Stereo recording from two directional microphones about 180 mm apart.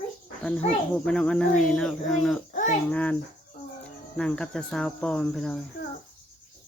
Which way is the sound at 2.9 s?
10° left (ahead or behind).